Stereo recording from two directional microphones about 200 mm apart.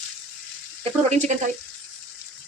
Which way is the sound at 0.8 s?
35° right (ahead or behind).